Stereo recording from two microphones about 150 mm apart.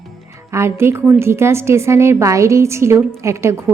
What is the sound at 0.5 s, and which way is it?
A woman's voice, 15° right (ahead or behind).